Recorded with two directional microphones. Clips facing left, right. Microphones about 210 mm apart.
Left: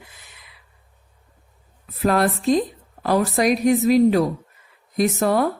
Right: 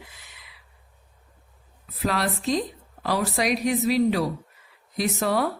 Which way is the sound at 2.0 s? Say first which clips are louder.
Left 7 dB; 50° left (ahead or behind).